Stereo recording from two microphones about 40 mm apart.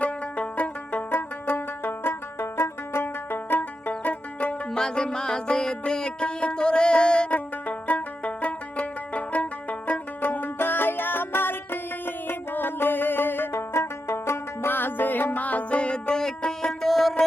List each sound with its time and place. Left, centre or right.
0.0 s music: left
3.8 s music: left
4.7 s music: centre
7.3 s music: left
10.2 s music: left
15.4 s music: left
15.8 s music: left; by 17.2 s centre